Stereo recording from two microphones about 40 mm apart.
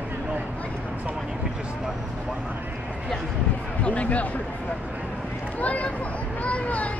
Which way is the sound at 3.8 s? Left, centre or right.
Left.